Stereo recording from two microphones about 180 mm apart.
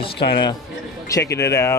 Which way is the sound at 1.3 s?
70° left (ahead or behind).